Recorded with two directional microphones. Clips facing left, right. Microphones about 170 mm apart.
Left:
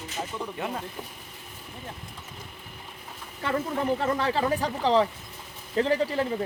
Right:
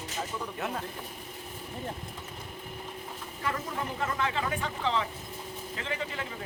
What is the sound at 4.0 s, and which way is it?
Speech, 35° left (ahead or behind).